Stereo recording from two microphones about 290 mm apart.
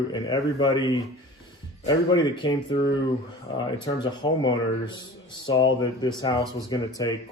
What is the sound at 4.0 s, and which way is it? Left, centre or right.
Speech, centre.